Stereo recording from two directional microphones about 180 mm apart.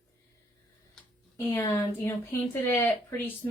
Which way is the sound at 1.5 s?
15° left (ahead or behind).